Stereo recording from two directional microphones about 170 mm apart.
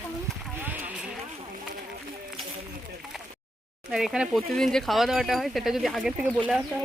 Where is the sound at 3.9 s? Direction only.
5° right (ahead or behind).